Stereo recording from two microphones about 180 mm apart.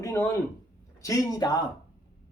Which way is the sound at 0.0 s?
15° left (ahead or behind).